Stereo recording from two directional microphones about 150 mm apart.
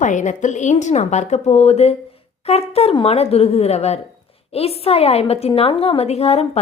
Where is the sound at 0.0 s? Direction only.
55° left (ahead or behind).